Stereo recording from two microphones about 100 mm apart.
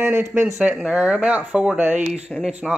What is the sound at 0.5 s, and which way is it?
Speech, 5° right (ahead or behind).